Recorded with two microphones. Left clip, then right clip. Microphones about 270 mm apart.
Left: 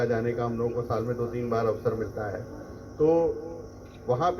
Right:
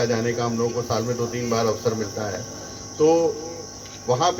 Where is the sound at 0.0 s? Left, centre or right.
Right.